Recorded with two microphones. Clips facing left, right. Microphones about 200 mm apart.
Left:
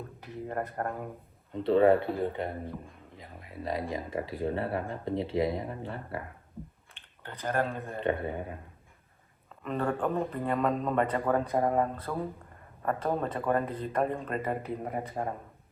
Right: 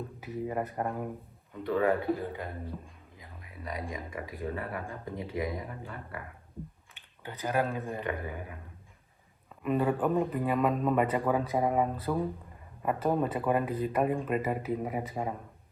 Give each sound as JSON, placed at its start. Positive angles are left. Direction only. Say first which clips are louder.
{"t": 0.2, "sound": "speech", "louder": "right 2 dB", "side_deg": -5}
{"t": 1.5, "sound": "speech", "louder": "left 5 dB", "side_deg": 30}
{"t": 7.2, "sound": "speech", "louder": "even", "side_deg": -10}
{"t": 8.0, "sound": "speech", "louder": "left 5 dB", "side_deg": 25}
{"t": 9.6, "sound": "speech", "louder": "right 3 dB", "side_deg": -5}